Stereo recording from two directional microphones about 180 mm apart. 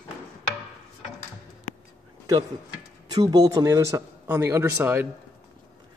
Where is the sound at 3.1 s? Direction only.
20° right (ahead or behind).